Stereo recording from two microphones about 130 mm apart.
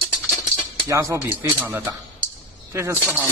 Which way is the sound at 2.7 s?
20° right (ahead or behind).